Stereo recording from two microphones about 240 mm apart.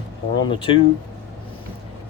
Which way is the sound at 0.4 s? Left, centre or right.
Left.